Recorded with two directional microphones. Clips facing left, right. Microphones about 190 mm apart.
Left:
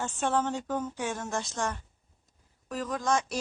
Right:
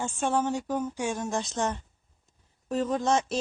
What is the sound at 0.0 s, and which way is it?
A woman's voice, 10° right (ahead or behind).